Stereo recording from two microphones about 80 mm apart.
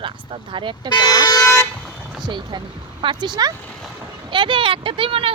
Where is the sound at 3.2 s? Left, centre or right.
Right.